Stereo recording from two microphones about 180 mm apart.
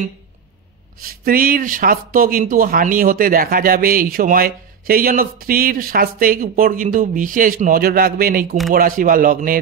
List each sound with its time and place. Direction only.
1.0 s speech: 50° right (ahead or behind)